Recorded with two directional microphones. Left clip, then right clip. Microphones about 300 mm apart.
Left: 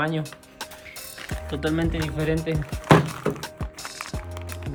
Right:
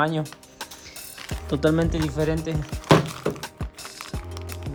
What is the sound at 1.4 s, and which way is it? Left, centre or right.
Speech, centre.